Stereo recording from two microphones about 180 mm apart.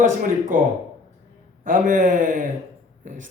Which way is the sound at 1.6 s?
50° right (ahead or behind).